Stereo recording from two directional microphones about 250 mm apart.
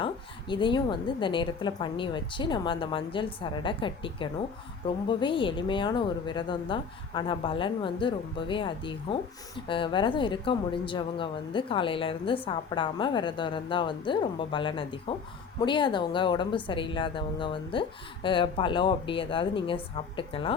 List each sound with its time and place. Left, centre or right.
0.0 s a woman's voice: centre